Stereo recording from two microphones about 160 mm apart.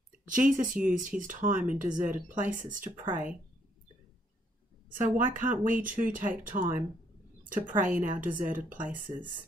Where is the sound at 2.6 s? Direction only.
55° right (ahead or behind).